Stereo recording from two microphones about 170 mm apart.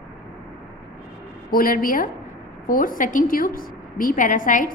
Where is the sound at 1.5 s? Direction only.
55° left (ahead or behind).